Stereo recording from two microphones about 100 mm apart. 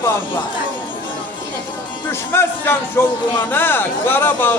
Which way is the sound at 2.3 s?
25° left (ahead or behind).